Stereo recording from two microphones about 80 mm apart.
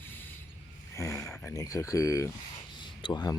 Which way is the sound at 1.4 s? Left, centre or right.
Left.